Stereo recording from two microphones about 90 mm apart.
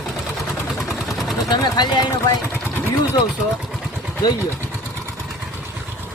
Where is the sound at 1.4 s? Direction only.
50° left (ahead or behind).